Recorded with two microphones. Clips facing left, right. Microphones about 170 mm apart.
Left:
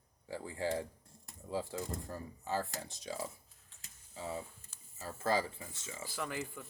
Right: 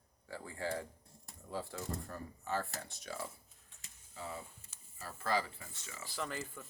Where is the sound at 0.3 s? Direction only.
15° left (ahead or behind).